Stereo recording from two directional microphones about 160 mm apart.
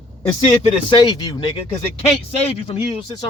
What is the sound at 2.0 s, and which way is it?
Speech, 40° left (ahead or behind).